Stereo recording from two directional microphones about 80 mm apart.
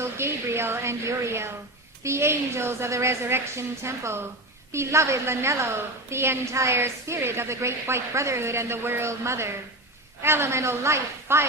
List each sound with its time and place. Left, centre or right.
0.0 s a woman's voice: right